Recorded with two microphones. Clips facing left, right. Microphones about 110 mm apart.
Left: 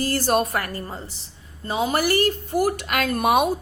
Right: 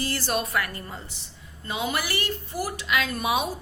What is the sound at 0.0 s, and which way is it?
A woman's voice, 45° left (ahead or behind).